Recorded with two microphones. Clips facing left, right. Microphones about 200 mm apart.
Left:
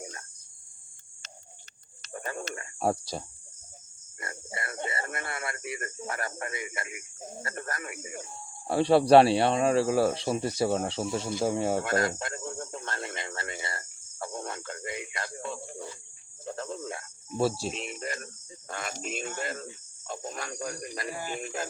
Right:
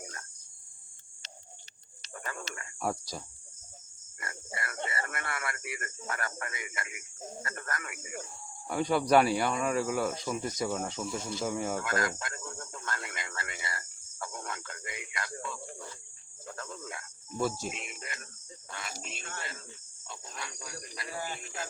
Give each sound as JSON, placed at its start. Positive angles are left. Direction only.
{"t": 0.0, "sound": "cricket", "side_deg": 25}
{"t": 2.1, "sound": "a sound", "side_deg": 30}
{"t": 2.6, "sound": "speech", "side_deg": 30}
{"t": 4.2, "sound": "cricket", "side_deg": 25}
{"t": 4.9, "sound": "speech", "side_deg": 25}
{"t": 18.7, "sound": "speech", "side_deg": 50}